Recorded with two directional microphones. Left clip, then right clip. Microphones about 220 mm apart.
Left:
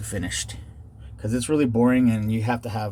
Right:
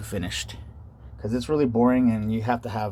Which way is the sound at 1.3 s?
Centre (ahead or behind).